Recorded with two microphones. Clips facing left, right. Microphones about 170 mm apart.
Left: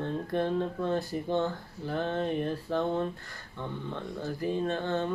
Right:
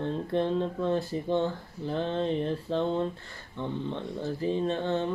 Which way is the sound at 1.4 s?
20° right (ahead or behind).